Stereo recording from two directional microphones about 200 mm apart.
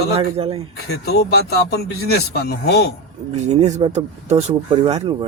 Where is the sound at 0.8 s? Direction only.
55° left (ahead or behind).